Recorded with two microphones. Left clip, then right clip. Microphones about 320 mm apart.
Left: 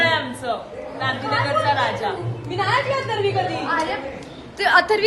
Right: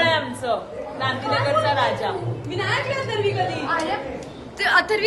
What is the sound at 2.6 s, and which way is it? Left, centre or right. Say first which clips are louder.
Speech: left 4 dB; centre.